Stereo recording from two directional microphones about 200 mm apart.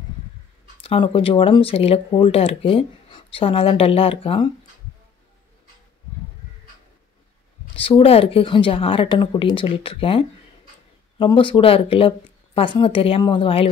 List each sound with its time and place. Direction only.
0.8 s speech: 25° left (ahead or behind)
7.7 s speech: 25° left (ahead or behind)